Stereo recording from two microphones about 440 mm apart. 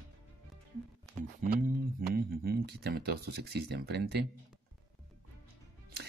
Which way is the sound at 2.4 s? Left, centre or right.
Right.